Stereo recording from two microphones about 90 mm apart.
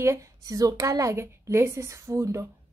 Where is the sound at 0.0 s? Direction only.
35° right (ahead or behind).